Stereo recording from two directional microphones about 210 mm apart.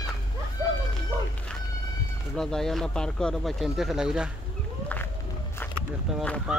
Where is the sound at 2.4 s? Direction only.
Centre (ahead or behind).